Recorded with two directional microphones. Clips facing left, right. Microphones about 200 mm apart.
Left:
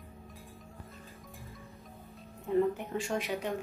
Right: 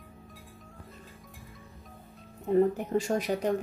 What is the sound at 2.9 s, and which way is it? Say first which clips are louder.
Speech: right 6 dB; 40° right (ahead or behind).